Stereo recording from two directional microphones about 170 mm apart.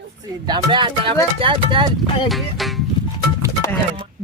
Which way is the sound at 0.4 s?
25° right (ahead or behind).